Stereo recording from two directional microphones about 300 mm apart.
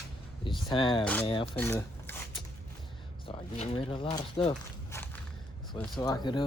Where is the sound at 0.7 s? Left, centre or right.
Centre.